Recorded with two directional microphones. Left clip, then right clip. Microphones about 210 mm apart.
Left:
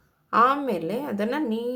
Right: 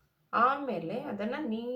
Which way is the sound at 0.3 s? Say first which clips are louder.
Left 7 dB; 50° left (ahead or behind).